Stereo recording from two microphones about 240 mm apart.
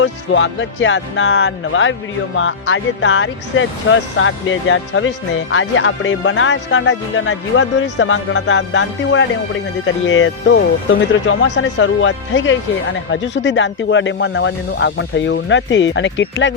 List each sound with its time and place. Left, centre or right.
0.0 s speech: left